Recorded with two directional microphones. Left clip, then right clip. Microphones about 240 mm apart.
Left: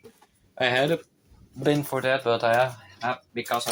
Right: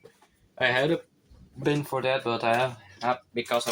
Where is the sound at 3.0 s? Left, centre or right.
Centre.